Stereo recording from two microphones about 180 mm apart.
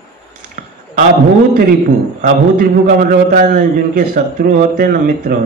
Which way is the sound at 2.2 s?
50° right (ahead or behind).